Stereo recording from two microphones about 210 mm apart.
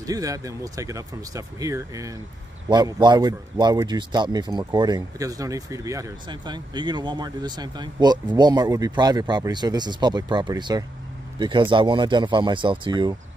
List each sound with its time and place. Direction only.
0.0 s a man's voice: 15° right (ahead or behind)